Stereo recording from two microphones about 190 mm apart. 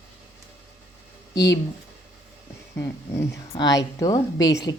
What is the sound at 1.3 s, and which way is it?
Speech, 20° left (ahead or behind).